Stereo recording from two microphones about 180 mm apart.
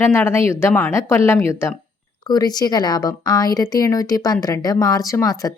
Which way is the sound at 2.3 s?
20° left (ahead or behind).